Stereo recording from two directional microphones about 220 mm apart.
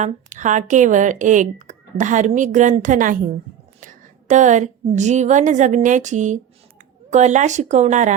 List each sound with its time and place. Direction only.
0.0 s a woman's voice: 35° right (ahead or behind)